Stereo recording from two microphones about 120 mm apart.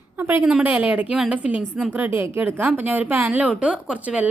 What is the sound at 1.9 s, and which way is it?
A woman's voice, 15° right (ahead or behind).